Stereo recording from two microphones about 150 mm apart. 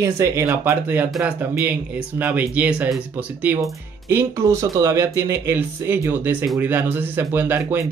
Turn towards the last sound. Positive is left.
turn(degrees=-15)  # may be behind; listen again after turning